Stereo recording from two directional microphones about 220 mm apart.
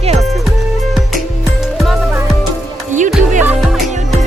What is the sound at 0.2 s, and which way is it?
Music, centre (ahead or behind).